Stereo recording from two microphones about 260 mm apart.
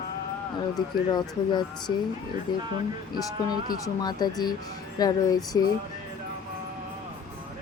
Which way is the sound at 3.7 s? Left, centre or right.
Centre.